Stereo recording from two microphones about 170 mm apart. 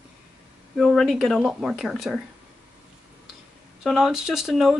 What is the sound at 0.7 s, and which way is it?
Speech, centre (ahead or behind).